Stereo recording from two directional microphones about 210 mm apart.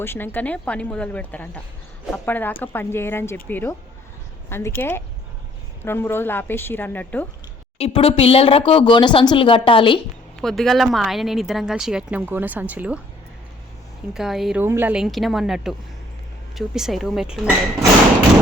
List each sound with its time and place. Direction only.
0.0 s speech: 10° left (ahead or behind)
7.8 s speech: 25° left (ahead or behind)
10.4 s a woman's voice: centre (ahead or behind)
14.1 s a woman's voice: centre (ahead or behind)